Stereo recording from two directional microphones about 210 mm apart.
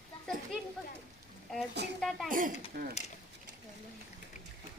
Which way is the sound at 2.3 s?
40° right (ahead or behind).